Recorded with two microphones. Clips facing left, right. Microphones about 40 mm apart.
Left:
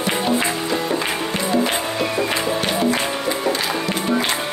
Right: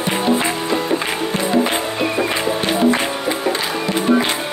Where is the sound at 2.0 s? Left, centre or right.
Centre.